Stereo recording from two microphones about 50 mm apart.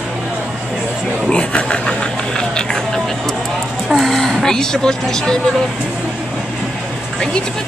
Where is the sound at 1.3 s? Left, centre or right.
Centre.